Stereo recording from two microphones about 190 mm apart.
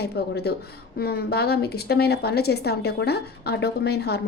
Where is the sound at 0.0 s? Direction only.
55° left (ahead or behind).